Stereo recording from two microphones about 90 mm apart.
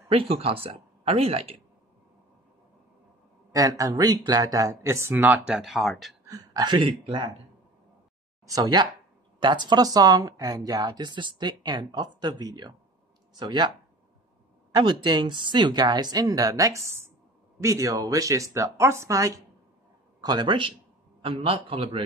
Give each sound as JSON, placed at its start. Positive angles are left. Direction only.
{"t": 0.1, "sound": "speech", "side_deg": -90}
{"t": 3.5, "sound": "speech", "side_deg": -40}
{"t": 5.7, "sound": "speech", "side_deg": 0}
{"t": 6.2, "sound": "a sound", "side_deg": -40}
{"t": 6.6, "sound": "speech", "side_deg": -60}
{"t": 8.5, "sound": "speech", "side_deg": -45}
{"t": 9.4, "sound": "speech", "side_deg": -55}
{"t": 14.8, "sound": "speech", "side_deg": -55}
{"t": 20.2, "sound": "speech", "side_deg": -50}
{"t": 21.2, "sound": "speech", "side_deg": -90}